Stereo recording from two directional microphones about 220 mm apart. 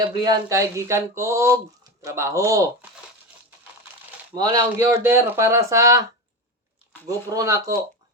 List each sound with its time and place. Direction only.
0.1 s speech: 15° right (ahead or behind)
4.4 s speech: 15° right (ahead or behind)
7.3 s speech: 15° right (ahead or behind)